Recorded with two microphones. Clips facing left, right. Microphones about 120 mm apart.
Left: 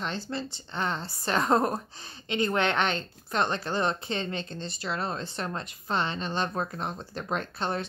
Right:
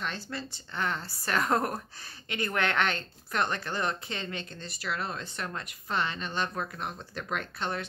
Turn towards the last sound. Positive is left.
turn(degrees=30)  # may be behind; listen again after turning